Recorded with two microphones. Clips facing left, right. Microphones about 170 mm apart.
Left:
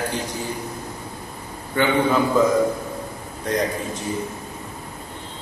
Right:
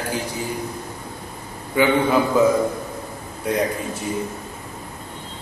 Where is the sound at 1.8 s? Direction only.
10° right (ahead or behind).